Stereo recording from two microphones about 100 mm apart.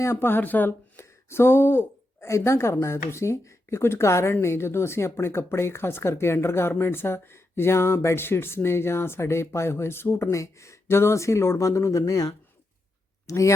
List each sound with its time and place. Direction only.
0.0 s speech: 25° left (ahead or behind)